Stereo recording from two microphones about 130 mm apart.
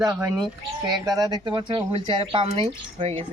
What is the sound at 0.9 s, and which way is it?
Speech, 30° right (ahead or behind).